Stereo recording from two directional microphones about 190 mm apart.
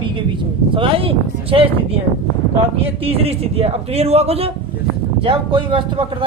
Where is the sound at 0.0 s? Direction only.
25° right (ahead or behind).